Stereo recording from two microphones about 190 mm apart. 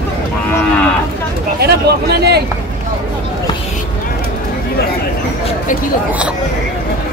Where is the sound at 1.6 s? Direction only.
60° right (ahead or behind).